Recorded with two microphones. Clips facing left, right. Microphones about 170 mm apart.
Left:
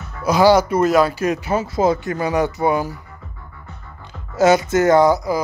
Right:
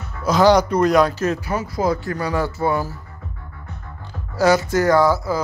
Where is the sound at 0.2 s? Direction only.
10° left (ahead or behind).